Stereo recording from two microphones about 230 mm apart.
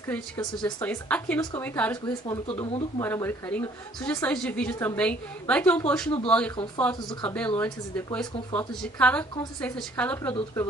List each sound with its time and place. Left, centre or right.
0.1 s a woman's voice: centre
0.7 s a woman's voice: centre
2.0 s a woman's voice: centre